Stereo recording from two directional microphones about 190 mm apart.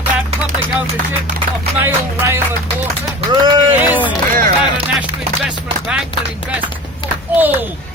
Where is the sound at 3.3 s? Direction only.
25° right (ahead or behind).